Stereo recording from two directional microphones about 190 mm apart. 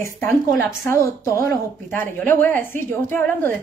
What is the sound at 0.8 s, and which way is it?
A woman's voice, 15° left (ahead or behind).